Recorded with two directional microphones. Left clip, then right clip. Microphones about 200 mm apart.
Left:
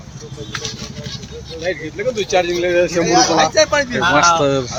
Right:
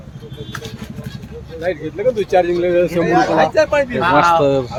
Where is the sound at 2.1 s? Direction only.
55° right (ahead or behind).